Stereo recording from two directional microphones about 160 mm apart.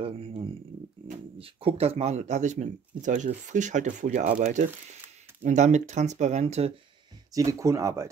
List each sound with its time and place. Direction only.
0.0 s a sound: 35° right (ahead or behind)
1.4 s speech: 35° right (ahead or behind)
7.3 s speech: 20° right (ahead or behind)